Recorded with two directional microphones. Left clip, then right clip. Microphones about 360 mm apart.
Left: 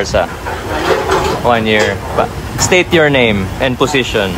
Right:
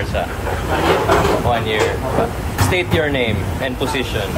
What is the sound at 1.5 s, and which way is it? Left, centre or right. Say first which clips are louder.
Speech: left 6 dB; left.